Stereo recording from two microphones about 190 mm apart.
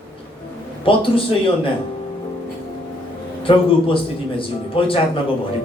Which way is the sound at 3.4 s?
30° left (ahead or behind).